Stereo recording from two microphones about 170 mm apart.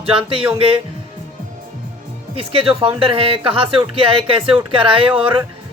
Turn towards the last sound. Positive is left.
turn(degrees=-30)  # may be behind; listen again after turning